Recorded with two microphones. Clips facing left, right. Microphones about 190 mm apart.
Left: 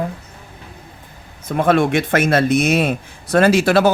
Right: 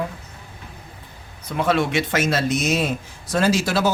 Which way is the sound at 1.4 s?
50° left (ahead or behind).